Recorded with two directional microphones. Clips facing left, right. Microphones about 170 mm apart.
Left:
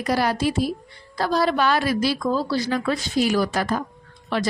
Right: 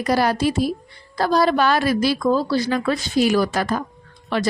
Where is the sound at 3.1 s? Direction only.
70° right (ahead or behind).